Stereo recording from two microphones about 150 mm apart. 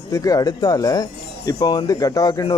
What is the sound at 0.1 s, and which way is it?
Speech, 25° left (ahead or behind).